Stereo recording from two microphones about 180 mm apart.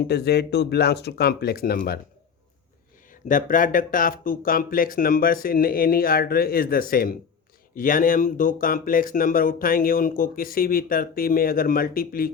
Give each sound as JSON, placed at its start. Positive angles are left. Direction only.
{"t": 0.1, "sound": "speech", "side_deg": 65}
{"t": 3.1, "sound": "speech", "side_deg": 50}